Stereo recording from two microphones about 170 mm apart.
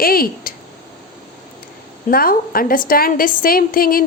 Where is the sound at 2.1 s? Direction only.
60° left (ahead or behind).